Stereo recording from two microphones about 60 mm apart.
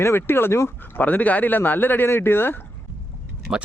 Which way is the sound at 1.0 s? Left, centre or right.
Left.